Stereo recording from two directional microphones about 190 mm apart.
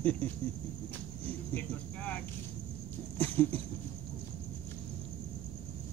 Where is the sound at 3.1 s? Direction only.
10° left (ahead or behind).